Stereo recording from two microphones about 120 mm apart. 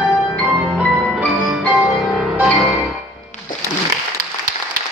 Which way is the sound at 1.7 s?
Centre (ahead or behind).